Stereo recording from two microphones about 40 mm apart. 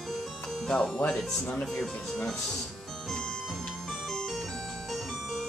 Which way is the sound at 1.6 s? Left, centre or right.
Centre.